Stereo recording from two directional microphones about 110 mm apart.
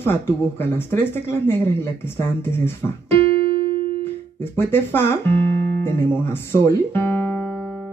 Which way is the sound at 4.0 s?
20° left (ahead or behind).